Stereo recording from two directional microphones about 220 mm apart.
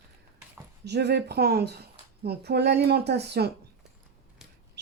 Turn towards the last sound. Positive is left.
turn(degrees=-50)  # may be behind; listen again after turning